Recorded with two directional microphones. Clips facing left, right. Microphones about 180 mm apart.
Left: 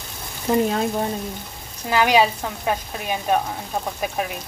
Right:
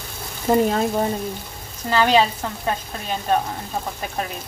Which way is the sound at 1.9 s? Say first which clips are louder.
Even; 10° left (ahead or behind).